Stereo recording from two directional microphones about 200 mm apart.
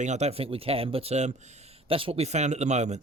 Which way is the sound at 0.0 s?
35° right (ahead or behind).